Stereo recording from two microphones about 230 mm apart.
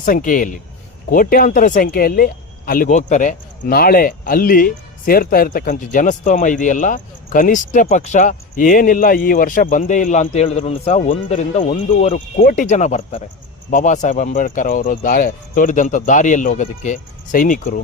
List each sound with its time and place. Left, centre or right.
0.0 s speech: left